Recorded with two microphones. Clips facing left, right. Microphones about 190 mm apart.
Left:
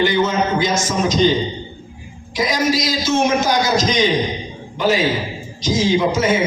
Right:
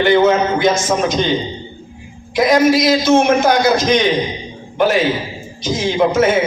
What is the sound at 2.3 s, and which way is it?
A man's voice, 60° right (ahead or behind).